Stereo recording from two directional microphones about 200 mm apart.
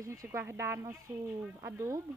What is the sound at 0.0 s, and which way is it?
Speech, 15° right (ahead or behind).